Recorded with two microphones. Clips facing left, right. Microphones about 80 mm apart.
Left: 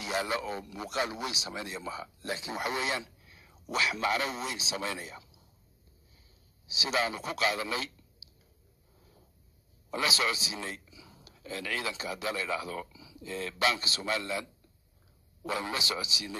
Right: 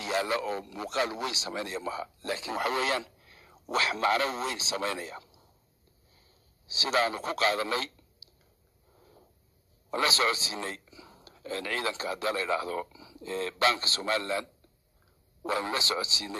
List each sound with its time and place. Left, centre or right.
0.4 s a man's voice: right
6.7 s a man's voice: right
8.9 s a sound: right
9.8 s a man's voice: right